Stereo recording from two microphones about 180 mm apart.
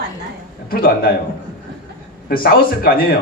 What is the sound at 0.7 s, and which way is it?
Speech, 55° left (ahead or behind).